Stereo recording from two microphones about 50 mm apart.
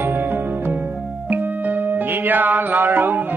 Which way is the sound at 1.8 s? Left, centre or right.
Right.